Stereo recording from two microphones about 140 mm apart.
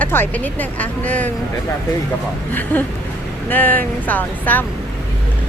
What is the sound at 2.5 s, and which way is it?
Speech, 10° left (ahead or behind).